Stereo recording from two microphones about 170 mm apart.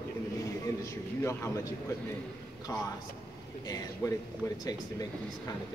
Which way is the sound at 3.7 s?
20° left (ahead or behind).